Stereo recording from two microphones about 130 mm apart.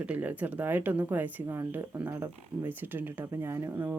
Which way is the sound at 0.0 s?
10° right (ahead or behind).